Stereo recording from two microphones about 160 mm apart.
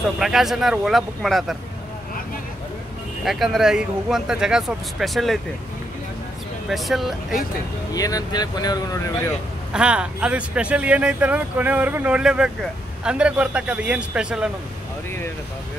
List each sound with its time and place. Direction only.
0.2 s speech: centre (ahead or behind)
3.3 s speech: centre (ahead or behind)
6.7 s speech: centre (ahead or behind)
7.9 s speech: 20° left (ahead or behind)
9.7 s speech: 5° right (ahead or behind)